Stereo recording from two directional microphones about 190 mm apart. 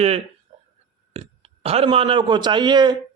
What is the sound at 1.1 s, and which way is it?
A man's voice, 35° right (ahead or behind).